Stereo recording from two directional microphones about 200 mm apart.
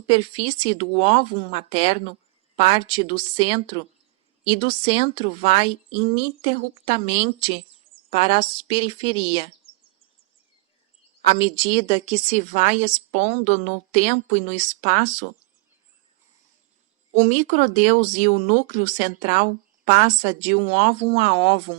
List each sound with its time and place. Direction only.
0.1 s speech: 30° left (ahead or behind)
11.2 s a woman's voice: 30° left (ahead or behind)
17.1 s a woman's voice: 35° left (ahead or behind)